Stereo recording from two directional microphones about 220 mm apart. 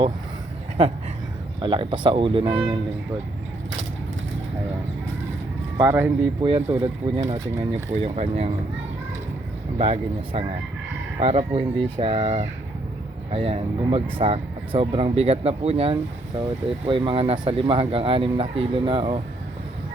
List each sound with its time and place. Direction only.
0.8 s speech: 25° right (ahead or behind)
5.7 s speech: 10° right (ahead or behind)
8.0 s speech: 25° right (ahead or behind)
9.7 s speech: 25° right (ahead or behind)